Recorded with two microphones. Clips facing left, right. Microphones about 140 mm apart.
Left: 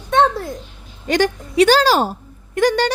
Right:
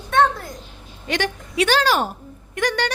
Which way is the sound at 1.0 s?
40° left (ahead or behind).